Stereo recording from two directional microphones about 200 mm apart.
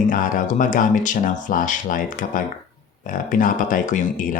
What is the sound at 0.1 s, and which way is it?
Speech, 40° left (ahead or behind).